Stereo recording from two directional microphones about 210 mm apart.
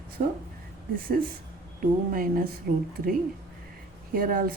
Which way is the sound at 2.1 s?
45° right (ahead or behind).